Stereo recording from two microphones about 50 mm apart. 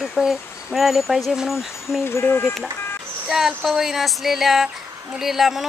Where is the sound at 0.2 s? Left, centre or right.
Centre.